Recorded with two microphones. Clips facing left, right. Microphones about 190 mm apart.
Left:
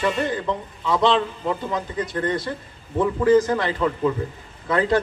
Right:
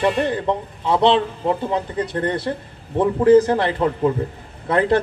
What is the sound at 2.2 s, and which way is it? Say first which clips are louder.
A man's voice: right 2 dB; 65° right (ahead or behind).